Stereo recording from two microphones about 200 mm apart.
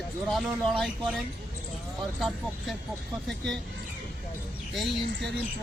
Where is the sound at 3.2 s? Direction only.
Centre (ahead or behind).